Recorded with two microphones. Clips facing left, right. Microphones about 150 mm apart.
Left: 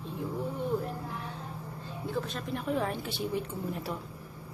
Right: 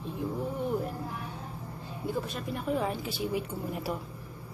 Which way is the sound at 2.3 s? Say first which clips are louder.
Right 1 dB; 5° right (ahead or behind).